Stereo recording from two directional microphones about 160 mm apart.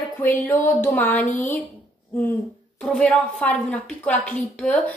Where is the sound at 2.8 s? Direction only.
5° left (ahead or behind).